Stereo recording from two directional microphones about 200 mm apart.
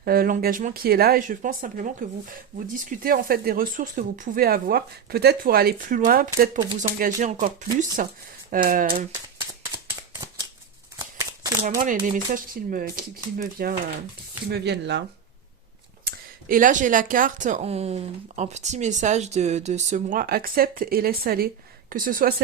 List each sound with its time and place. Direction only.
0.0 s speech: 50° right (ahead or behind)
9.8 s shuffling cards: 15° right (ahead or behind)
10.9 s a sound: 15° right (ahead or behind)
12.0 s speech: 40° right (ahead or behind); by 15.0 s 60° right (ahead or behind)
16.0 s speech: 45° right (ahead or behind)